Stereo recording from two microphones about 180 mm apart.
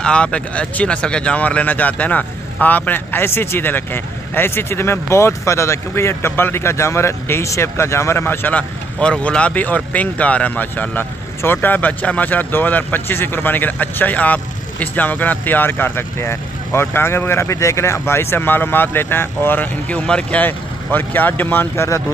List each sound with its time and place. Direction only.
0.0 s speech: 5° left (ahead or behind)